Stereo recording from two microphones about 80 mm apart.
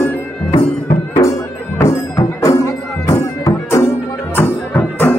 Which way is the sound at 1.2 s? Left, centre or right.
Left.